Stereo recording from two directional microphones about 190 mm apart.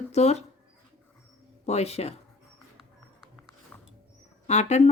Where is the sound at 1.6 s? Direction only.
35° left (ahead or behind).